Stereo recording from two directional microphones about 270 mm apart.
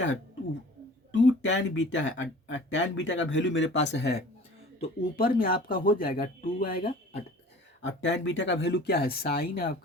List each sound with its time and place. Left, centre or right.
1.1 s speech: left